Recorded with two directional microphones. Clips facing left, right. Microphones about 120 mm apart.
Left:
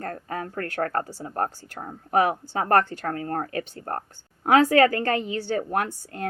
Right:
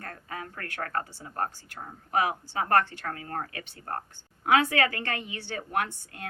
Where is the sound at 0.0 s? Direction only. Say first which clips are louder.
Left 8 dB; 40° left (ahead or behind).